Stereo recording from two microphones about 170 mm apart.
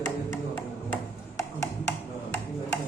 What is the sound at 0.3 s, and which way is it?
Music, 15° left (ahead or behind).